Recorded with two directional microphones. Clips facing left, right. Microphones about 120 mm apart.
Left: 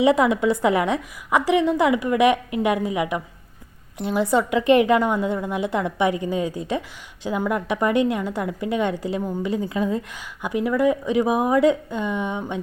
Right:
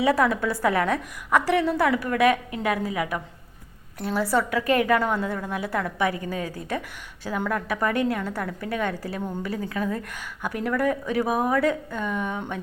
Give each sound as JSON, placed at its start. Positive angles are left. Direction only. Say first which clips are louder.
{"t": 0.0, "sound": "a woman's voice", "louder": "left 4 dB", "side_deg": 20}